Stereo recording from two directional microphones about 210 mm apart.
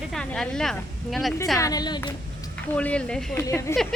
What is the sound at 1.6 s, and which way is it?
Speech, 20° left (ahead or behind).